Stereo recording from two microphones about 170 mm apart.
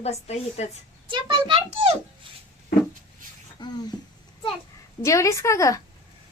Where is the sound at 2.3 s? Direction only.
30° right (ahead or behind).